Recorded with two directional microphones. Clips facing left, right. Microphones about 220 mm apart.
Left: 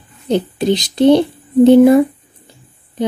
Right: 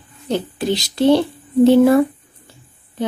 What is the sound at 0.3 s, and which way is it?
Speech, 20° left (ahead or behind).